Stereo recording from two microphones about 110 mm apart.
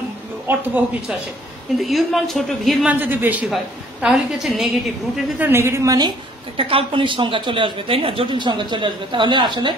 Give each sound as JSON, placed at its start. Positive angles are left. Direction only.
{"t": 1.8, "sound": "a woman's voice", "side_deg": 0}
{"t": 2.9, "sound": "a man's voice", "side_deg": -15}
{"t": 3.4, "sound": "a woman's voice", "side_deg": -5}
{"t": 5.4, "sound": "a woman's voice", "side_deg": -20}
{"t": 6.5, "sound": "a woman's voice", "side_deg": -55}